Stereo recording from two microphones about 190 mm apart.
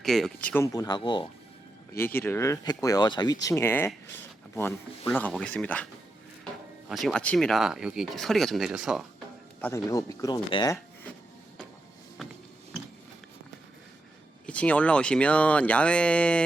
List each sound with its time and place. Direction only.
0.0 s speech: centre (ahead or behind); by 1.3 s 25° left (ahead or behind)
2.0 s speech: 10° left (ahead or behind)
5.0 s speech: 5° left (ahead or behind)
9.6 s speech: 15° left (ahead or behind)
12.2 s a sound: centre (ahead or behind)
14.4 s speech: 5° left (ahead or behind)